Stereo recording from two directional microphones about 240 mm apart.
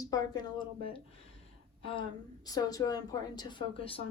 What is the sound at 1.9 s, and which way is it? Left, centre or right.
A woman's voice, centre.